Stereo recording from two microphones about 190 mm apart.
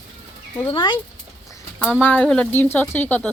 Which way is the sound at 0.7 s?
25° left (ahead or behind).